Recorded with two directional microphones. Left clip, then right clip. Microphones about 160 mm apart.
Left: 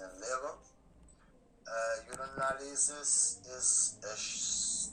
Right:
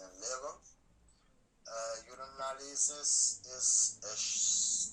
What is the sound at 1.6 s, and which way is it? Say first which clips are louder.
A man's voice: left 6 dB; 15° left (ahead or behind).